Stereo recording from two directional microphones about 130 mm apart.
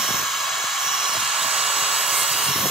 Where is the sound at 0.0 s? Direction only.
Centre (ahead or behind).